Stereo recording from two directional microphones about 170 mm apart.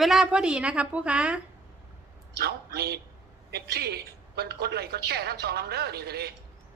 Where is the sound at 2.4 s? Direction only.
70° right (ahead or behind).